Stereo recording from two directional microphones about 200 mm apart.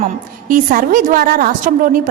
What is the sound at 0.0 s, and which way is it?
A woman's voice, 45° right (ahead or behind).